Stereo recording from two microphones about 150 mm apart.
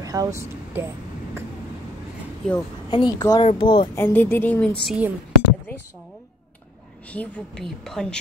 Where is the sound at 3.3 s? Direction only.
35° left (ahead or behind).